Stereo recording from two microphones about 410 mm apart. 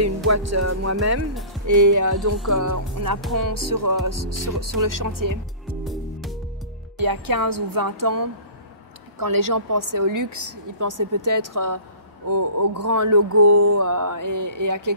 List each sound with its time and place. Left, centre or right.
0.0 s speech: right
1.7 s mantra: right
7.0 s mantra: right